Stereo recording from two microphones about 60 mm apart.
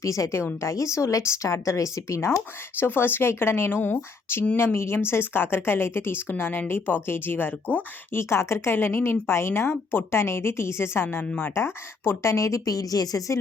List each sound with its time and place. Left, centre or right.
0.0 s a woman's voice: left
2.7 s speech: left
8.1 s a woman's voice: left